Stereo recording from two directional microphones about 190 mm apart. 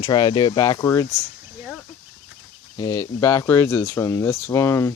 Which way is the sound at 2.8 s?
20° left (ahead or behind).